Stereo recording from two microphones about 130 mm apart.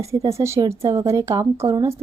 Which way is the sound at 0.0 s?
20° right (ahead or behind).